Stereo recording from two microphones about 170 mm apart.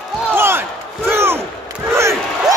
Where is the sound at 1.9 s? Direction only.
15° right (ahead or behind).